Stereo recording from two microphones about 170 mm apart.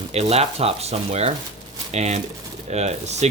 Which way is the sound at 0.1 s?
40° right (ahead or behind).